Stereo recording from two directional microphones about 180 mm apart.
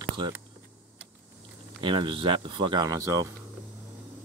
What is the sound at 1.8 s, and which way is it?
Speech, 30° right (ahead or behind).